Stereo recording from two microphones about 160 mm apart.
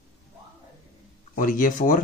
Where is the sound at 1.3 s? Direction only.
55° left (ahead or behind).